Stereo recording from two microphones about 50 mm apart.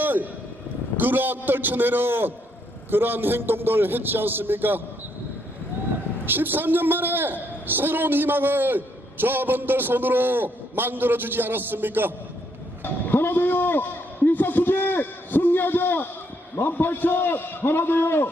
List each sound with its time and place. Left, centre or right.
0.0 s vehicle: right
0.9 s a man's voice: right
6.2 s a man's voice: right
12.8 s a man's voice: left